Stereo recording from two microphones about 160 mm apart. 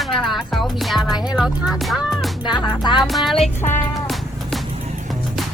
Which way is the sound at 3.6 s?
15° left (ahead or behind).